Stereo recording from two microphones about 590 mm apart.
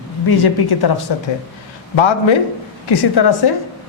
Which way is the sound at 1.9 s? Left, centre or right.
Left.